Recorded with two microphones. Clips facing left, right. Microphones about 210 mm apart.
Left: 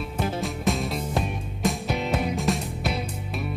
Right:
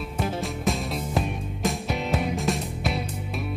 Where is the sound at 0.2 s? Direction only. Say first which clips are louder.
Even; centre (ahead or behind).